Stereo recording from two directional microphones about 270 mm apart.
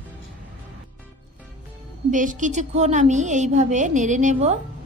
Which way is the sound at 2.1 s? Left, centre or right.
Right.